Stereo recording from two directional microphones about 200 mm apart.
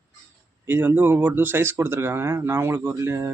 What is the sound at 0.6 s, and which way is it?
Speech, 10° right (ahead or behind).